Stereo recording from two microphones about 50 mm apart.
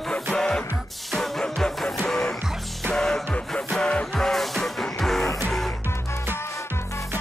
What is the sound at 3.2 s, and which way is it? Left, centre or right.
Music, left.